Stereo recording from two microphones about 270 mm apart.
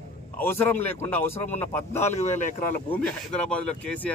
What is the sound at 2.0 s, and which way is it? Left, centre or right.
Speech, left.